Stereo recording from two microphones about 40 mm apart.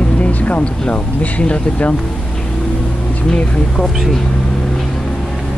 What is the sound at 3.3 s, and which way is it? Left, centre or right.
Speech, left.